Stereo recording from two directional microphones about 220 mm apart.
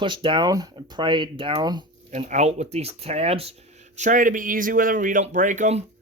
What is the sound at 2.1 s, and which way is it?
Speech, 30° right (ahead or behind).